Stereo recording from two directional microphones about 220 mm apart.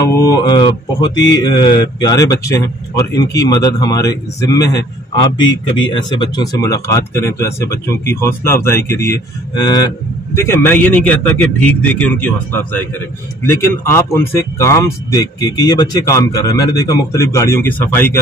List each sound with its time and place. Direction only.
0.0 s a man's voice: 15° left (ahead or behind)